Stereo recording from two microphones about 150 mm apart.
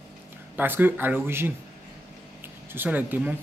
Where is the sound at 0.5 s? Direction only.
15° right (ahead or behind).